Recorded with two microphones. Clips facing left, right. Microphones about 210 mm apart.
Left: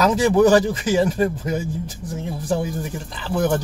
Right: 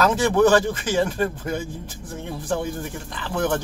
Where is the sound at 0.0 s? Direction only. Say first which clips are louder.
Left 2 dB; 10° left (ahead or behind).